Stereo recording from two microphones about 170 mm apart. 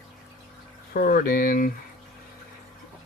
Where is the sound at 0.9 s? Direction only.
55° left (ahead or behind).